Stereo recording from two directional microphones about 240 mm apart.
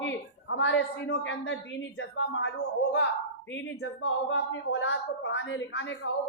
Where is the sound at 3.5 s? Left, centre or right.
Left.